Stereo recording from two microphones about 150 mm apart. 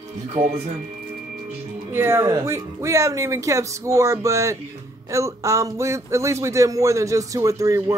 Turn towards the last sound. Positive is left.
turn(degrees=-20)  # may be behind; listen again after turning